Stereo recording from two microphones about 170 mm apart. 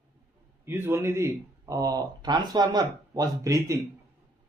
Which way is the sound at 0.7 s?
15° right (ahead or behind).